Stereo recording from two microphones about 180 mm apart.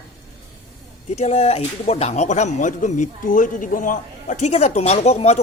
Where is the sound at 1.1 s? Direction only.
40° left (ahead or behind).